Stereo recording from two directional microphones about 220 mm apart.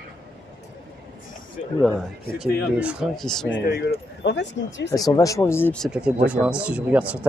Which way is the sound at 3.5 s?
45° left (ahead or behind).